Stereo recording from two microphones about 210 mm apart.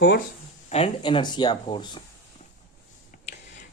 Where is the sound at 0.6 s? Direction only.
30° left (ahead or behind).